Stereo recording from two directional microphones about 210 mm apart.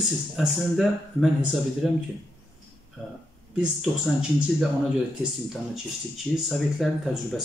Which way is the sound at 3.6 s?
5° right (ahead or behind).